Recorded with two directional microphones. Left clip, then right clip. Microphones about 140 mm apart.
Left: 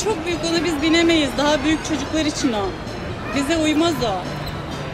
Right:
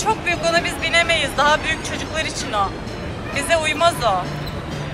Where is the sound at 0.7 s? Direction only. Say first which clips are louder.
Even; 5° left (ahead or behind).